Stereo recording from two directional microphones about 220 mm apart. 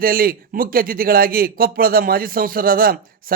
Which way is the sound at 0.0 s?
40° right (ahead or behind).